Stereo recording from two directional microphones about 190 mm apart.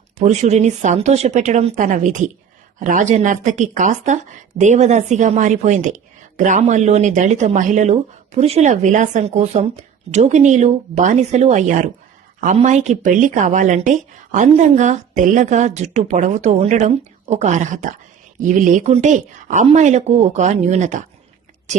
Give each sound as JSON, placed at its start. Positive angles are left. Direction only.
{"t": 0.2, "sound": "speech", "side_deg": -35}